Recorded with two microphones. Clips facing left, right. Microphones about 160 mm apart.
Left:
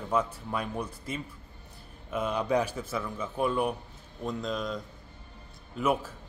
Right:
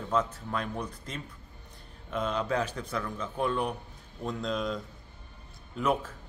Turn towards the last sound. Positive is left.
turn(degrees=10)  # may be behind; listen again after turning